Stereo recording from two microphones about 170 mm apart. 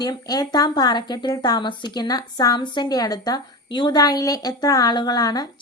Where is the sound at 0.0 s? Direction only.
25° left (ahead or behind).